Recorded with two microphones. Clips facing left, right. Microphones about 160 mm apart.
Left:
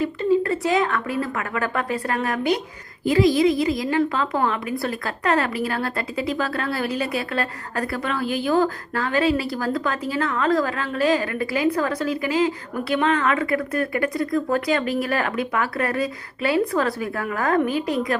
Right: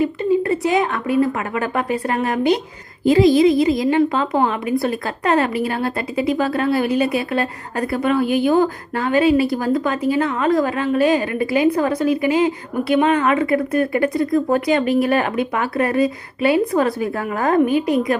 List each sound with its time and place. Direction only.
0.0 s a woman's voice: 20° right (ahead or behind)